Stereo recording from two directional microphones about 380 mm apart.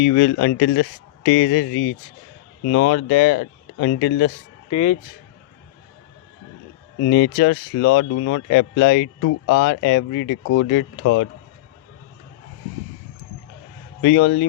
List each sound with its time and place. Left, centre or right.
0.0 s speech: left
4.7 s speech: centre
7.1 s speech: left
14.0 s speech: left